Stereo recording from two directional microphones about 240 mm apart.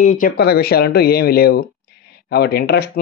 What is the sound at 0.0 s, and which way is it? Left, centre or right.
Speech, left.